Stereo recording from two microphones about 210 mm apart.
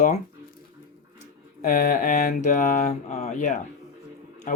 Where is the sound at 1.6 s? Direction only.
40° left (ahead or behind).